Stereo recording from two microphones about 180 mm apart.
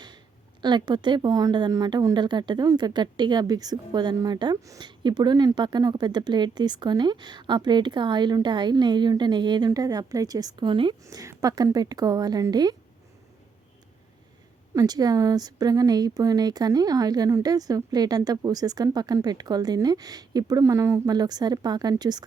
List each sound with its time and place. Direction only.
0.6 s a woman's voice: 25° right (ahead or behind)
14.8 s a woman's voice: 20° right (ahead or behind)